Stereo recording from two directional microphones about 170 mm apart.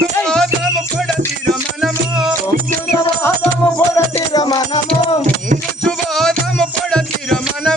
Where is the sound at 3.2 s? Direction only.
15° left (ahead or behind).